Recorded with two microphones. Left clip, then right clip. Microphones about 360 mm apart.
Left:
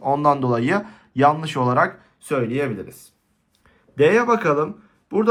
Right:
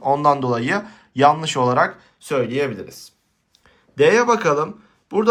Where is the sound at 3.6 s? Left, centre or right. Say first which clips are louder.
Right 1 dB; centre.